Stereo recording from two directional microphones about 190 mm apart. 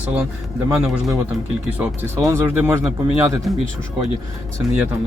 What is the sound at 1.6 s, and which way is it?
Speech, 10° right (ahead or behind).